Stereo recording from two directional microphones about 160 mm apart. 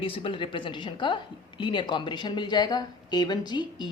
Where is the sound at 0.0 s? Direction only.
35° left (ahead or behind).